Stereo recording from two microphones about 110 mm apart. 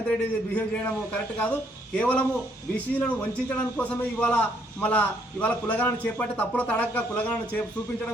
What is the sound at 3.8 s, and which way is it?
A man's voice, 10° left (ahead or behind).